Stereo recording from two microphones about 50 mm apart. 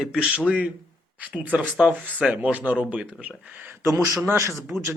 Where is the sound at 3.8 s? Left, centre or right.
Right.